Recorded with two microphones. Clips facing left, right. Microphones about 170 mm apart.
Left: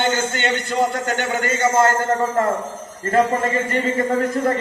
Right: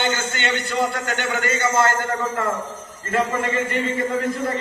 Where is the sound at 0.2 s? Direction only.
45° left (ahead or behind).